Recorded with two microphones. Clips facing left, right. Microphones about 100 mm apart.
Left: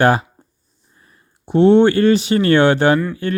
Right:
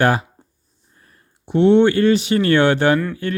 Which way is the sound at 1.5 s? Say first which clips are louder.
Left 2 dB; 35° left (ahead or behind).